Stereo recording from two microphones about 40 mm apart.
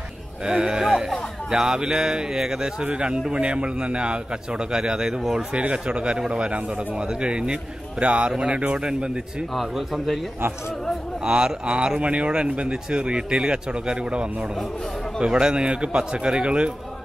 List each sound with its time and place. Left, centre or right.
0.5 s speech: centre
2.8 s a man's voice: right
5.5 s a man's voice: right
8.3 s a man's voice: centre
9.5 s a man's voice: centre
11.2 s a man's voice: right